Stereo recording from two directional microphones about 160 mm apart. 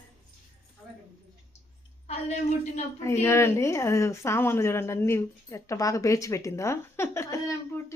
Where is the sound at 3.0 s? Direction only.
15° left (ahead or behind).